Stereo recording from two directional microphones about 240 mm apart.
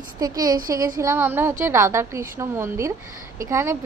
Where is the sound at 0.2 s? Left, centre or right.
Centre.